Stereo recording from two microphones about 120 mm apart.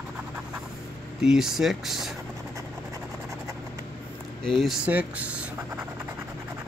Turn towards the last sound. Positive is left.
turn(degrees=-10)  # may be behind; listen again after turning